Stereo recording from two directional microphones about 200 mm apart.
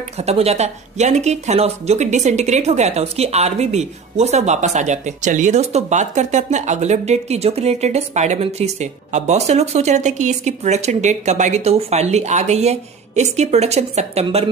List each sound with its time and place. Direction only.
0.2 s speech: 30° right (ahead or behind)